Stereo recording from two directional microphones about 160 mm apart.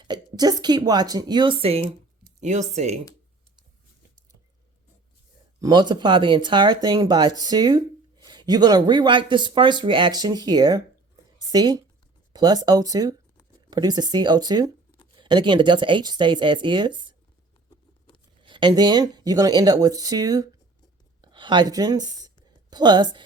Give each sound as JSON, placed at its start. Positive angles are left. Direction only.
{"t": 0.0, "sound": "speech", "side_deg": -25}
{"t": 5.5, "sound": "speech", "side_deg": -25}
{"t": 17.7, "sound": "patter", "side_deg": 30}
{"t": 18.4, "sound": "speech", "side_deg": -30}